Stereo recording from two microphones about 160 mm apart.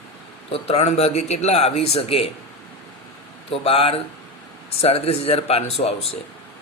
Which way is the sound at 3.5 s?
35° left (ahead or behind).